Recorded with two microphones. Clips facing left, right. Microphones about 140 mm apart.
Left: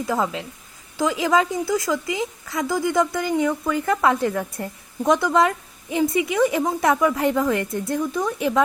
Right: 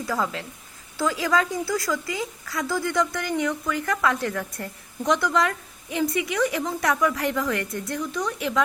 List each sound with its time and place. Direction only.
0.0 s a woman's voice: 20° left (ahead or behind)